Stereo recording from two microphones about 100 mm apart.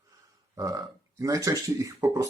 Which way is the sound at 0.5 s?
35° right (ahead or behind).